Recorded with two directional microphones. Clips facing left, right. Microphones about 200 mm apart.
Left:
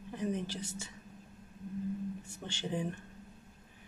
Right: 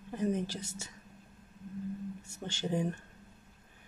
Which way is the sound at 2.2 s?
40° right (ahead or behind).